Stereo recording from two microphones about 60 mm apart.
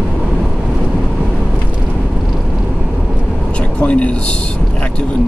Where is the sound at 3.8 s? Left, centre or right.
Left.